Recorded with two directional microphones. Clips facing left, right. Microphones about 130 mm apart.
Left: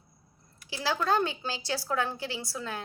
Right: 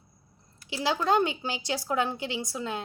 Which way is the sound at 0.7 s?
20° right (ahead or behind).